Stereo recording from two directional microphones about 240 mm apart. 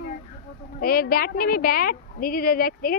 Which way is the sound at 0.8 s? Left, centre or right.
Left.